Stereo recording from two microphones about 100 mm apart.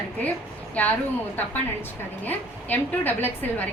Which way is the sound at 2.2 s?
20° left (ahead or behind).